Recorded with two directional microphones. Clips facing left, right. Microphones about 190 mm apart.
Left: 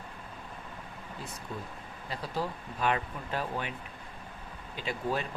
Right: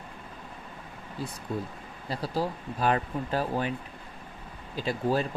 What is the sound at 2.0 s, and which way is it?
Speech, 35° right (ahead or behind).